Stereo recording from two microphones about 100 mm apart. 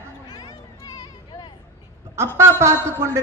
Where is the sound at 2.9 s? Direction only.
25° right (ahead or behind).